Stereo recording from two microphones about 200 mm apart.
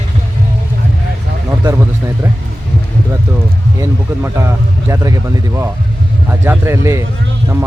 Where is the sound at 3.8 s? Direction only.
15° right (ahead or behind).